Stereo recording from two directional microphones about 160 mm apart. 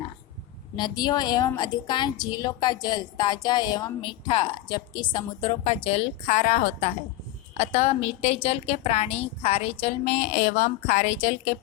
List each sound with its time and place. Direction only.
0.8 s a woman's voice: 25° left (ahead or behind); by 11.3 s 50° left (ahead or behind)